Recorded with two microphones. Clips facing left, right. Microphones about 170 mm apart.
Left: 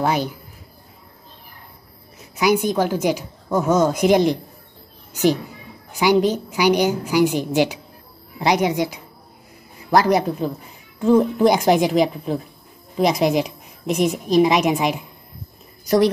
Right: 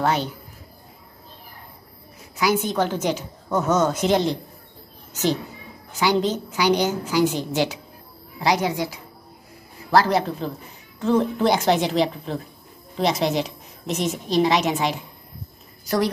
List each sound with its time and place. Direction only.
0.0 s a woman's voice: 10° left (ahead or behind)
2.3 s a woman's voice: 15° left (ahead or behind)